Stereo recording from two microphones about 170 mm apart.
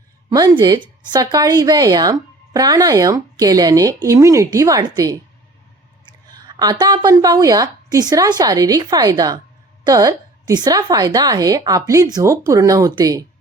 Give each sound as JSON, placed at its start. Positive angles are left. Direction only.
{"t": 0.3, "sound": "speech", "side_deg": -20}